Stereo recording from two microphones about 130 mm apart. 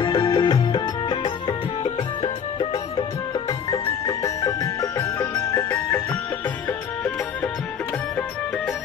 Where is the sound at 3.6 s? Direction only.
25° left (ahead or behind).